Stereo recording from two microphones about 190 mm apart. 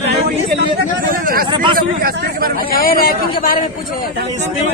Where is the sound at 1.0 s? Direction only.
50° right (ahead or behind).